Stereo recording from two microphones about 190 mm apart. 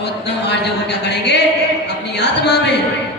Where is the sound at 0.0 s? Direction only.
65° left (ahead or behind).